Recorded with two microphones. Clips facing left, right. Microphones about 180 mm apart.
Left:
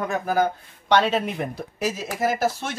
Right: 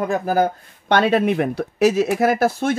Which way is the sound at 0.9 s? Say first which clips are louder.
Right 4 dB; 55° right (ahead or behind).